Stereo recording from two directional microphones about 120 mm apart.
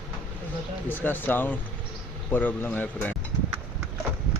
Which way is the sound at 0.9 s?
15° left (ahead or behind).